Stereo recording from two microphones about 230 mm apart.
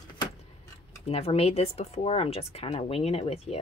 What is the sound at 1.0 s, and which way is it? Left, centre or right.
Speech, left.